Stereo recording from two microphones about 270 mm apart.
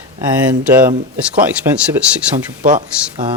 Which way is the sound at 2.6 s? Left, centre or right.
Right.